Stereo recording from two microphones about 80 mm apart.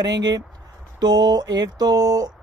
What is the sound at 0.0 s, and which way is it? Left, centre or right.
Speech, right.